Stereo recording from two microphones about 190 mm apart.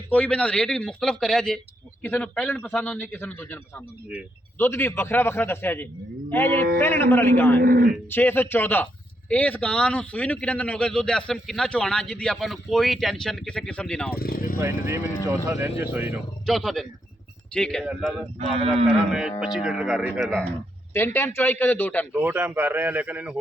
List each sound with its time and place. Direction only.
0.1 s a man's voice: 5° left (ahead or behind)
7.6 s speech: 50° right (ahead or behind)
8.1 s a man's voice: 10° left (ahead or behind)
14.2 s speech: 50° left (ahead or behind)
14.6 s a man's voice: 15° right (ahead or behind)
16.5 s speech: centre (ahead or behind)
18.3 s speech: 30° right (ahead or behind)
19.5 s speech: 5° right (ahead or behind)
20.9 s a man's voice: 10° left (ahead or behind)
22.1 s a man's voice: 10° right (ahead or behind)